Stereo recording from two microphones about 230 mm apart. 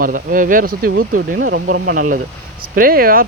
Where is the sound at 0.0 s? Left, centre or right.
Right.